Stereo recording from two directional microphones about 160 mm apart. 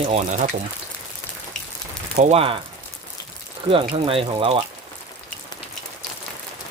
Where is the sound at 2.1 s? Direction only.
45° right (ahead or behind).